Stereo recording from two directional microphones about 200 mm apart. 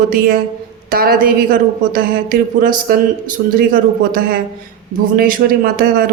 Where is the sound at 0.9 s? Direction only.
45° right (ahead or behind).